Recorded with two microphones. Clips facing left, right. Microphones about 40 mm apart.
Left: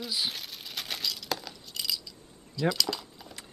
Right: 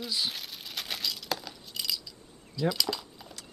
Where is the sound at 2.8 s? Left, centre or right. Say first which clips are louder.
Even; centre.